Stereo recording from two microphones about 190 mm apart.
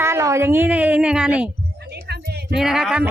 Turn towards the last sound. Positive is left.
turn(degrees=-5)  # may be behind; listen again after turning